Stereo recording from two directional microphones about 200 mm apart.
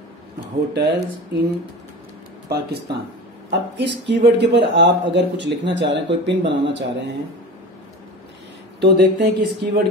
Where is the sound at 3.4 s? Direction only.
60° right (ahead or behind).